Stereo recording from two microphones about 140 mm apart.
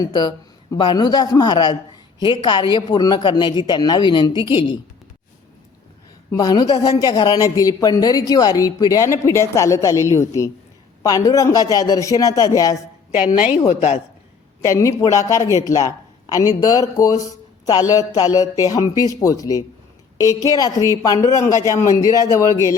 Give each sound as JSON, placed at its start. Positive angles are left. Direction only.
{"t": 0.0, "sound": "speech", "side_deg": 30}
{"t": 6.3, "sound": "speech", "side_deg": 25}
{"t": 13.7, "sound": "a woman's voice", "side_deg": 50}
{"t": 14.6, "sound": "speech", "side_deg": 20}